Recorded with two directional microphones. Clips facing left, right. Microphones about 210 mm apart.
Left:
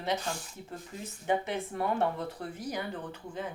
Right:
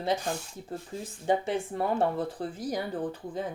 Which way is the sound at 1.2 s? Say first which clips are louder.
Right 3 dB; 30° right (ahead or behind).